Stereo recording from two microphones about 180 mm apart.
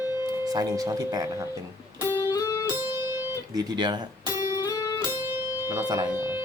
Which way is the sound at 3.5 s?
20° right (ahead or behind).